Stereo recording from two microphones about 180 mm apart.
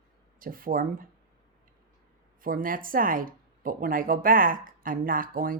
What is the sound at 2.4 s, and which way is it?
A woman's voice, 50° right (ahead or behind).